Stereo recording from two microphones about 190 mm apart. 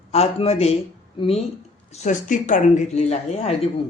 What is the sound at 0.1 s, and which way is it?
Speech, 30° left (ahead or behind).